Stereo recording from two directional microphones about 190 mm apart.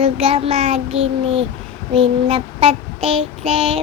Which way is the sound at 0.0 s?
30° right (ahead or behind).